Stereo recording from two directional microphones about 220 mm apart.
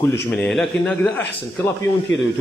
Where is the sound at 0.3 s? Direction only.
Centre (ahead or behind).